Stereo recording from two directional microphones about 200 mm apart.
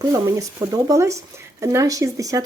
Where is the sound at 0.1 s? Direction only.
15° right (ahead or behind).